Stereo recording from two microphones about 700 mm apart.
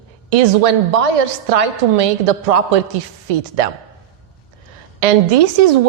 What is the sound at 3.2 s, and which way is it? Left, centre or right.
Speech, right.